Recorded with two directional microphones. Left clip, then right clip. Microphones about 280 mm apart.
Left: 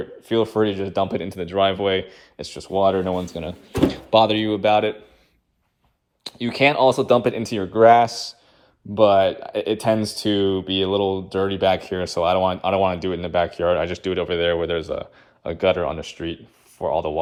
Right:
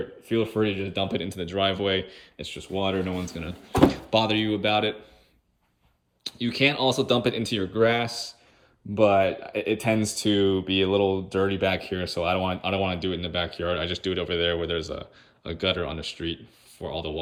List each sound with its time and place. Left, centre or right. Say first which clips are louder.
0.0 s speech: left 5 dB; centre
3.5 s speech: right 1 dB; centre
6.2 s speech: left 5 dB; centre
8.0 s a man's voice: left 8 dB; left
9.0 s speech: left 5 dB; centre